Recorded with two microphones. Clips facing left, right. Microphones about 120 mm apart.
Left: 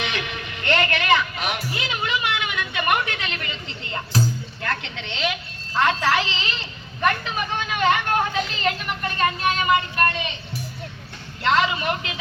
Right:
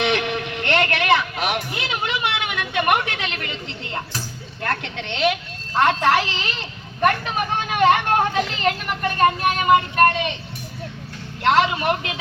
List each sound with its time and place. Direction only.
0.0 s music: 65° right (ahead or behind)
2.9 s a woman's voice: 65° right (ahead or behind)
4.6 s a woman's voice: 55° right (ahead or behind)
11.4 s a woman's voice: 60° right (ahead or behind)